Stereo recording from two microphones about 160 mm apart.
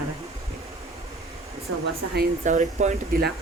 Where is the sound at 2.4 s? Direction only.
50° right (ahead or behind).